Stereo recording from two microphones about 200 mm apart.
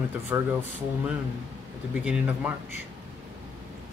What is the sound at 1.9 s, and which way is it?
Speech, 5° right (ahead or behind).